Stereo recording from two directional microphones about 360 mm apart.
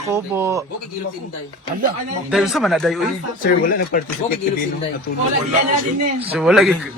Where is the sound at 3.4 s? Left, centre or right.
Left.